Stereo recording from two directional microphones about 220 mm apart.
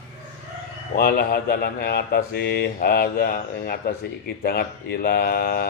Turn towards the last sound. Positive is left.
turn(degrees=45)  # may be behind; listen again after turning